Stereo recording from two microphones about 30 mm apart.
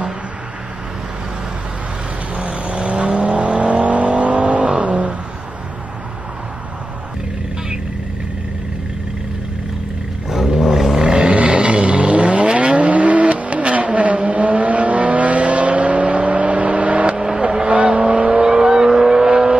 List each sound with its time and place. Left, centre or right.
2.3 s vehicle: right
3.8 s vehicle: right
10.6 s vehicle: centre
11.0 s vehicle: right
17.4 s vehicle: right
18.1 s vehicle: right
18.4 s vehicle: right